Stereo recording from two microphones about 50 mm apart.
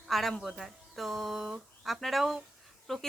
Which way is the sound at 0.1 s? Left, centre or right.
Centre.